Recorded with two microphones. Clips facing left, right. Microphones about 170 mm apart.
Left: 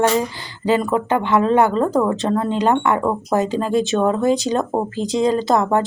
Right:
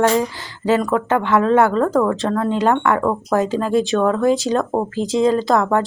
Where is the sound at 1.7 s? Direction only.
20° left (ahead or behind).